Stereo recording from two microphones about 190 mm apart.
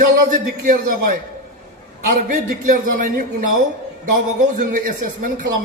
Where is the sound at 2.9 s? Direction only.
45° right (ahead or behind).